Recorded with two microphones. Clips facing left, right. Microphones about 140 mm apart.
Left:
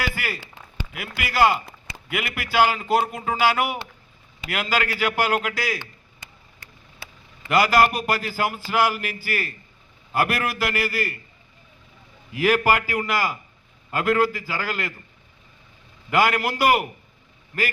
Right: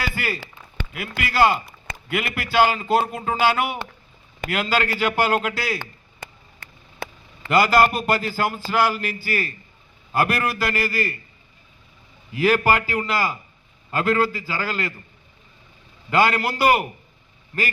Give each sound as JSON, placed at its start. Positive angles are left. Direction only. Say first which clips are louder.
{"t": 0.9, "sound": "a man's voice", "louder": "right 1 dB", "side_deg": 5}
{"t": 5.8, "sound": "a sound", "louder": "right 6 dB", "side_deg": -55}
{"t": 7.4, "sound": "a man's voice", "louder": "right 1 dB", "side_deg": 5}
{"t": 12.3, "sound": "a man's voice", "louder": "right 1 dB", "side_deg": 10}
{"t": 16.0, "sound": "a man's voice", "louder": "right 1 dB", "side_deg": 10}